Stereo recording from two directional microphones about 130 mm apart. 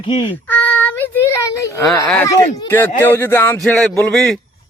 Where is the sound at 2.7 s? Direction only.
20° left (ahead or behind).